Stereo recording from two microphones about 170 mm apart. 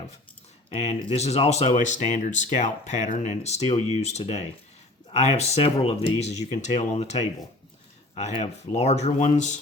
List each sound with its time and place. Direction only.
0.7 s speech: 35° left (ahead or behind)